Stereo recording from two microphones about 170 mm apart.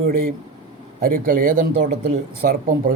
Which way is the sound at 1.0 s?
55° right (ahead or behind).